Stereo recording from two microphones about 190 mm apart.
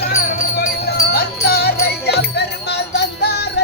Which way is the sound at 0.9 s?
55° left (ahead or behind).